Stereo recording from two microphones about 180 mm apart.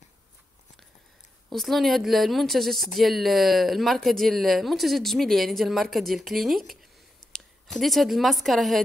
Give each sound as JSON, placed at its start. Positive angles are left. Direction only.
{"t": 1.5, "sound": "a woman's voice", "side_deg": 0}